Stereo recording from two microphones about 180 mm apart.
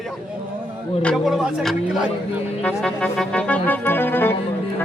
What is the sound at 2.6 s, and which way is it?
Music, 5° left (ahead or behind).